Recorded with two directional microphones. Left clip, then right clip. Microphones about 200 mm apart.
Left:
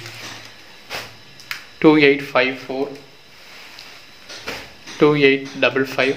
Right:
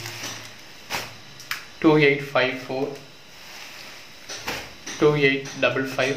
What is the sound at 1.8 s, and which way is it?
Speech, 55° left (ahead or behind).